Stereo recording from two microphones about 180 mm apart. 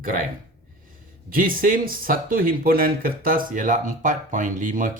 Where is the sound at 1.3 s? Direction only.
50° right (ahead or behind).